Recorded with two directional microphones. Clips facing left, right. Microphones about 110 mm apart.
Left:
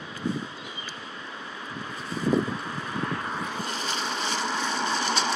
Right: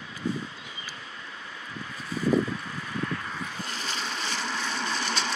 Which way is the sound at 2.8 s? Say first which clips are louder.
Left 1 dB; 30° left (ahead or behind).